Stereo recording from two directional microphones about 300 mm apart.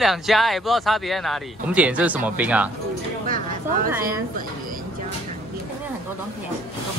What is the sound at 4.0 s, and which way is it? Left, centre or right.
Speech, right.